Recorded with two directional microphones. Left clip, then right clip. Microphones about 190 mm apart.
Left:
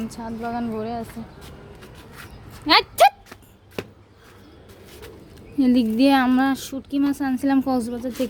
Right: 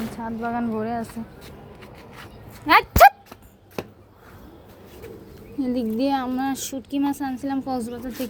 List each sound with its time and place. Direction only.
0.1 s speech: 5° left (ahead or behind)
2.1 s dog: 20° right (ahead or behind)
2.6 s speech: 10° left (ahead or behind)
3.8 s a sound: 30° right (ahead or behind)
5.5 s speech: 45° left (ahead or behind)
6.5 s speech: 20° left (ahead or behind)
7.0 s a woman's voice: 30° left (ahead or behind)